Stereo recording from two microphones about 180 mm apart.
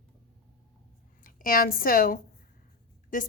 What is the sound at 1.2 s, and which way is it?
A woman's voice, 50° left (ahead or behind).